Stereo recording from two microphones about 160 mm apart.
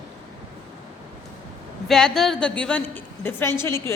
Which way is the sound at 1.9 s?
5° left (ahead or behind).